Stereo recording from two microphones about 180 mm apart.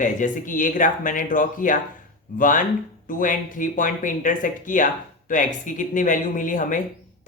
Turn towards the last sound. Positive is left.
turn(degrees=45)  # may be behind; listen again after turning